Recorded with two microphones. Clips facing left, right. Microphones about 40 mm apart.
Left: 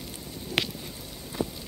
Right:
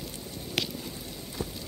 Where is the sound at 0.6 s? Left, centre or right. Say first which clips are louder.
Left 3 dB; centre.